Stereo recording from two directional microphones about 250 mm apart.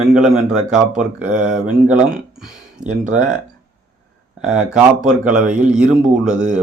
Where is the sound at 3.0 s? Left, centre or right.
Right.